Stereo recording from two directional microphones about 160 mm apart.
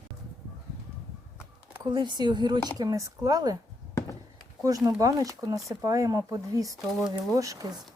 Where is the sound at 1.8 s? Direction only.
25° right (ahead or behind).